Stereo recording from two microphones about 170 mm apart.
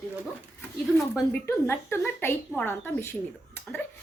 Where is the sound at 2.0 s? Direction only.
10° left (ahead or behind).